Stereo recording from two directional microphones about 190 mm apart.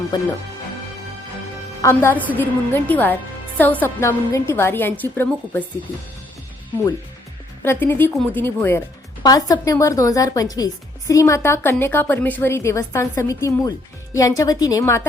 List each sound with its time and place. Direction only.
0.1 s speech: 20° left (ahead or behind)
1.8 s a woman's voice: 15° left (ahead or behind)
7.6 s a woman's voice: 10° left (ahead or behind)